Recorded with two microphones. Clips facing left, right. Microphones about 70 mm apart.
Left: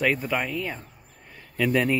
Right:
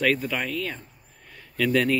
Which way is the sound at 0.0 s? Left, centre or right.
Centre.